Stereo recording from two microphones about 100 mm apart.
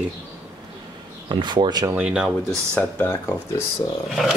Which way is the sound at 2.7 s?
20° left (ahead or behind).